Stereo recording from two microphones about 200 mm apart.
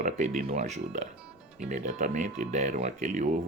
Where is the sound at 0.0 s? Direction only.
40° right (ahead or behind).